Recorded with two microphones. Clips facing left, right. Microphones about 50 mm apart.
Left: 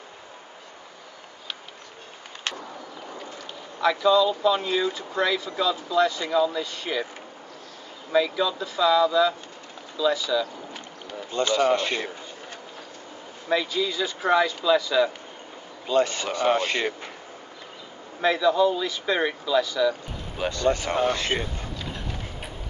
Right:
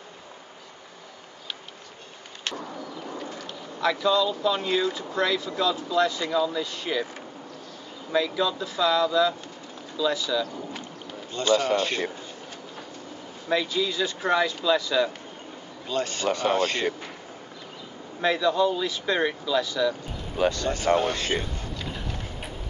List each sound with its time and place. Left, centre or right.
2.6 s bird: centre
5.6 s speech: centre
8.1 s speech: centre
9.9 s boat: centre
11.3 s speech: left
13.5 s speech: centre
15.9 s speech: left
18.2 s speech: centre
20.4 s speech: left
21.7 s clip-clop: centre